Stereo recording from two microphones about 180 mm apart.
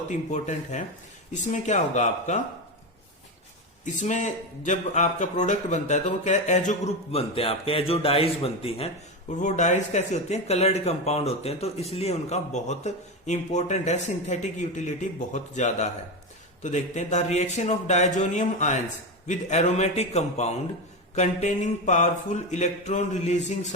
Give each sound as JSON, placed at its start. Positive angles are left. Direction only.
{"t": 0.1, "sound": "speech", "side_deg": 45}
{"t": 3.8, "sound": "speech", "side_deg": 40}